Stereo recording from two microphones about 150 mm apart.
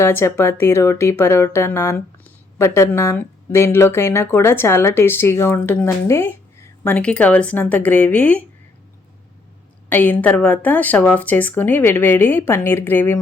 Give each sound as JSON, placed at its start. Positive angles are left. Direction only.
{"t": 0.0, "sound": "speech", "side_deg": 15}
{"t": 9.9, "sound": "speech", "side_deg": 10}